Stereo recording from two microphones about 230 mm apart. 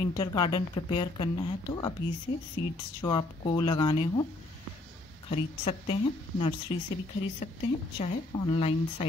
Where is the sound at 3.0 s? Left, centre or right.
Centre.